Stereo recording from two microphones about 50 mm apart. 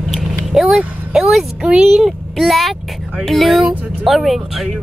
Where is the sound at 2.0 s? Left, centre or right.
Centre.